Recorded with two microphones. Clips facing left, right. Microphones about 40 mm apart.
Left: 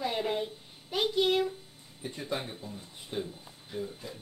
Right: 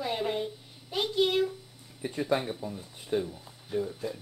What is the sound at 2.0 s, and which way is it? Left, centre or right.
Speech, right.